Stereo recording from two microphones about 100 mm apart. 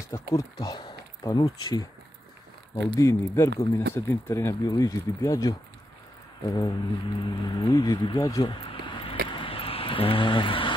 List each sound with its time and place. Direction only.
0.1 s speech: 35° left (ahead or behind)
0.7 s a sound: 45° left (ahead or behind)
3.0 s speech: 30° left (ahead or behind)
4.6 s speech: 40° left (ahead or behind)
8.2 s speech: 30° left (ahead or behind)
8.5 s a sound: 55° left (ahead or behind)